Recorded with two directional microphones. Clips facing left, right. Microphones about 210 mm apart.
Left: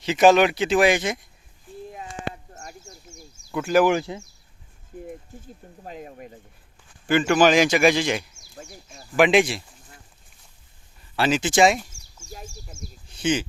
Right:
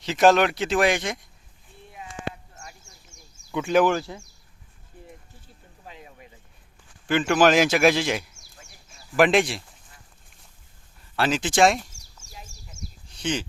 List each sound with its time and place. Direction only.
0.0 s speech: centre (ahead or behind)
2.5 s a sound: 40° left (ahead or behind)
3.5 s speech: 5° left (ahead or behind)
3.9 s speech: 20° left (ahead or behind)
5.8 s speech: 45° left (ahead or behind)
7.1 s speech: centre (ahead or behind)
11.2 s speech: centre (ahead or behind)
12.2 s bird: 10° left (ahead or behind)
13.2 s speech: 5° left (ahead or behind)